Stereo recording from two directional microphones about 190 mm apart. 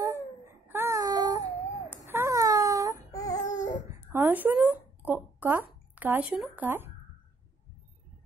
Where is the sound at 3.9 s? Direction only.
15° right (ahead or behind).